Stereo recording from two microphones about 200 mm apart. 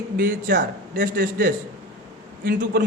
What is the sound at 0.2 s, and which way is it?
A man's voice, 45° right (ahead or behind).